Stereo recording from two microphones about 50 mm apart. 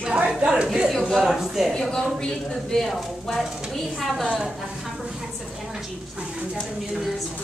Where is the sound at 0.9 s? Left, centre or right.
Centre.